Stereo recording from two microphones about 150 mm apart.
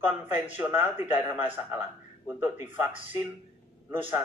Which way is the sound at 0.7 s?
15° right (ahead or behind).